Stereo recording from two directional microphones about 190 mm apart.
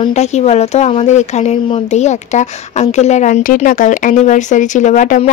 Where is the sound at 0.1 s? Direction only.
35° left (ahead or behind).